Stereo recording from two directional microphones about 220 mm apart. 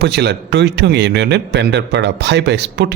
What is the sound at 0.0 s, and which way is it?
Speech, 50° right (ahead or behind).